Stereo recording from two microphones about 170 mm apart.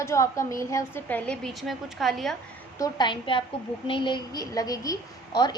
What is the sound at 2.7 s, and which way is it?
A woman's voice, 25° left (ahead or behind).